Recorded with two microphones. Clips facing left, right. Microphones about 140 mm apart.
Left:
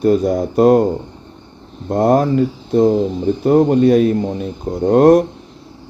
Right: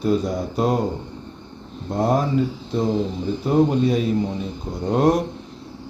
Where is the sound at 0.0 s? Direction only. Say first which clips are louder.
Left 7 dB; 55° left (ahead or behind).